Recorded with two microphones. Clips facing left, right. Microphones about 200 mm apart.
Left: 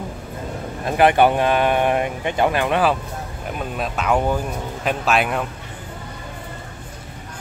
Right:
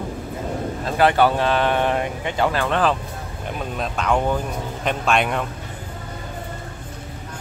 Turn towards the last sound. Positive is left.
turn(degrees=5)  # may be behind; listen again after turning